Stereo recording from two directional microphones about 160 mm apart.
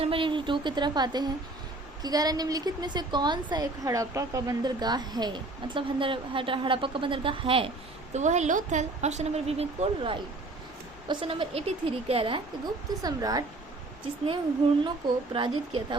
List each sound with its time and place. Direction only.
0.0 s a woman's voice: 35° right (ahead or behind)
8.1 s a woman's voice: 45° right (ahead or behind); by 13.4 s 25° right (ahead or behind)
14.8 s a woman's voice: 30° right (ahead or behind)